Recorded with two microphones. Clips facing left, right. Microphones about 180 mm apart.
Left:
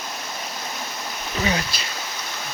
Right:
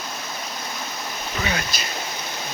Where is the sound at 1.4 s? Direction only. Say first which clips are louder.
Left 4 dB; 30° left (ahead or behind).